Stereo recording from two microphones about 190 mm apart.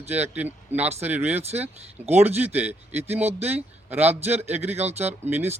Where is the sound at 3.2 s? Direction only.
35° right (ahead or behind).